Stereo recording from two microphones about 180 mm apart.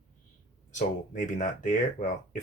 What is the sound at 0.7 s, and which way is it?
Speech, 45° left (ahead or behind).